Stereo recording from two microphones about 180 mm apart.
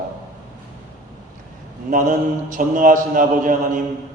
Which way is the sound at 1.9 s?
45° right (ahead or behind).